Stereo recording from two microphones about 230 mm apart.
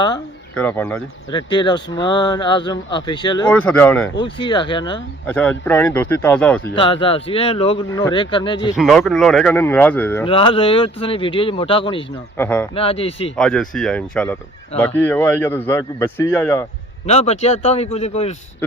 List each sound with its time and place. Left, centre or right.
0.5 s speech: centre
1.3 s speech: centre
3.5 s speech: centre
4.2 s speech: centre
5.2 s speech: centre
6.7 s speech: left
8.7 s speech: centre
10.2 s speech: left
12.4 s speech: centre
12.7 s speech: left
13.3 s speech: centre
17.1 s speech: left